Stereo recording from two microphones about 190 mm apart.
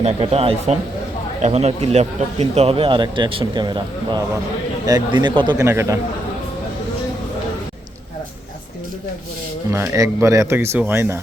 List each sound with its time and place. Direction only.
0.0 s a man's voice: 30° right (ahead or behind); by 6.0 s 15° right (ahead or behind)
9.7 s speech: 15° right (ahead or behind)